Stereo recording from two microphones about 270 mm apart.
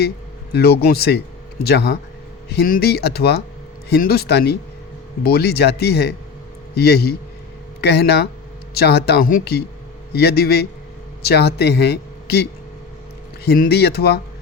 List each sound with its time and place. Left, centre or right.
0.5 s speech: left